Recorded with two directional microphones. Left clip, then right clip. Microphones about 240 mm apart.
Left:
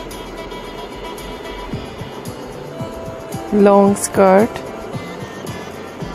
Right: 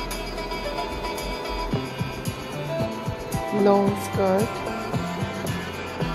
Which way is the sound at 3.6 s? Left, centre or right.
Left.